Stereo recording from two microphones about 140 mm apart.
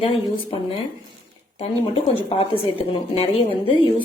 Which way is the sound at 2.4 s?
45° left (ahead or behind).